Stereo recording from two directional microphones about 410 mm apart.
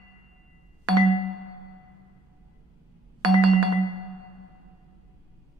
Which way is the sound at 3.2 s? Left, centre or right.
Right.